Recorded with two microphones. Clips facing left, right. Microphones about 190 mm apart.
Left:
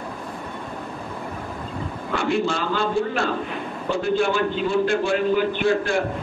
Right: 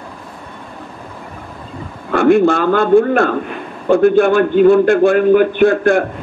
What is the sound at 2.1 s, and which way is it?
A man's voice, 55° right (ahead or behind).